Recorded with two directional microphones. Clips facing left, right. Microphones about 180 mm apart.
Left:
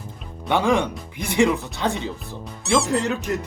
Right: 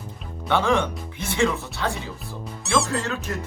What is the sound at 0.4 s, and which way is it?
Speech, 15° left (ahead or behind).